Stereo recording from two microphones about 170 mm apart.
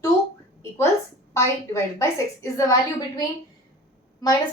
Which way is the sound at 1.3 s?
15° left (ahead or behind).